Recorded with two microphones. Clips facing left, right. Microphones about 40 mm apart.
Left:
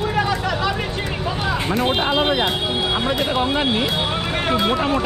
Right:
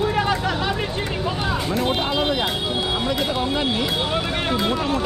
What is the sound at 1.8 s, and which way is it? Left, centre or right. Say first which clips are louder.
Speech: left 4 dB; left.